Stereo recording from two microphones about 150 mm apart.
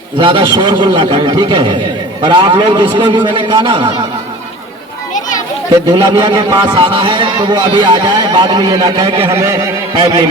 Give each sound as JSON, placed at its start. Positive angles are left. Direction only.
{"t": 0.2, "sound": "a man's voice", "side_deg": -35}
{"t": 5.9, "sound": "speech", "side_deg": -20}
{"t": 6.7, "sound": "speech", "side_deg": -35}